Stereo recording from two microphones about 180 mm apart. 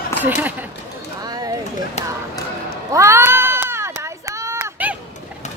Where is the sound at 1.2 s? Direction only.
20° right (ahead or behind).